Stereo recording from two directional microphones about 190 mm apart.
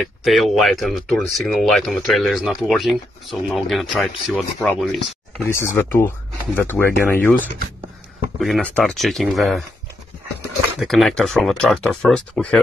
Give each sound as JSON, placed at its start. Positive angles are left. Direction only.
{"t": 0.0, "sound": "speech", "side_deg": 0}
{"t": 5.5, "sound": "speech", "side_deg": 15}
{"t": 10.8, "sound": "speech", "side_deg": 0}